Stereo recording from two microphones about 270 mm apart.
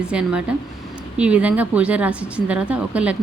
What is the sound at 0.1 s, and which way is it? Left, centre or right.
Speech, centre.